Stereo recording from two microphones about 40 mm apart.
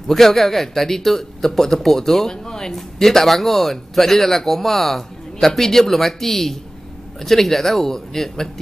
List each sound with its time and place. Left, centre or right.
0.1 s speech: centre